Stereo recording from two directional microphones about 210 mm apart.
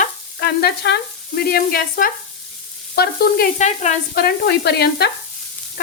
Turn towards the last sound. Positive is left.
turn(degrees=50)  # may be behind; listen again after turning